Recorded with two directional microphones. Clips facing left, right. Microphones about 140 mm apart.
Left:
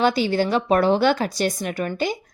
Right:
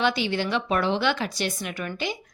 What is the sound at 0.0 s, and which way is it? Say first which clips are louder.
A woman's voice: left 5 dB; 40° left (ahead or behind).